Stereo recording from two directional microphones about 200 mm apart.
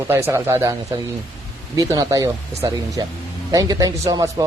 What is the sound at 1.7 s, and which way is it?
A man's voice, 20° right (ahead or behind).